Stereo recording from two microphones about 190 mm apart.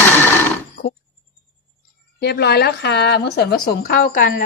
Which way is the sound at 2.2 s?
60° left (ahead or behind).